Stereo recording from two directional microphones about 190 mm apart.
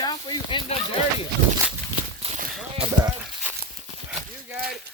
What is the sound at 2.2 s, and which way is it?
Walk, 35° right (ahead or behind).